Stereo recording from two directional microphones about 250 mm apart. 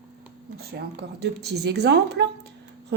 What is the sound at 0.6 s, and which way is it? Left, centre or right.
Speech, right.